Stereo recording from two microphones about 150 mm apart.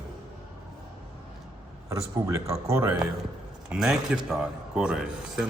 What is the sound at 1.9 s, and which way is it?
Speech, 20° right (ahead or behind).